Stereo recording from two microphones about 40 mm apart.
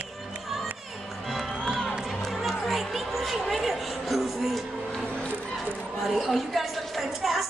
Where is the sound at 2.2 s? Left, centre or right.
Centre.